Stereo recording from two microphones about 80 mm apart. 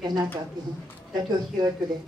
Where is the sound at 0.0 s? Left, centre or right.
Right.